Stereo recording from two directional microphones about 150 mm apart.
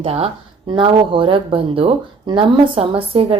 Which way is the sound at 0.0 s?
40° right (ahead or behind).